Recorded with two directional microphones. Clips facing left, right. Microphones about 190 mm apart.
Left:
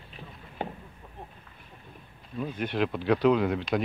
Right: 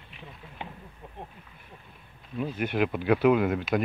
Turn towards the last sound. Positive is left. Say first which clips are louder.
# right 1 dB
turn(degrees=-5)  # may be behind; listen again after turning